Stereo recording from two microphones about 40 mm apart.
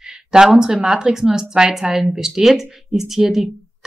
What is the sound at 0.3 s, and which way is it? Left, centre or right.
A woman's voice, centre.